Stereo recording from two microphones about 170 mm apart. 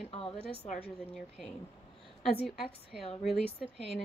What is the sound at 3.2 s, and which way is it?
Speech, centre (ahead or behind).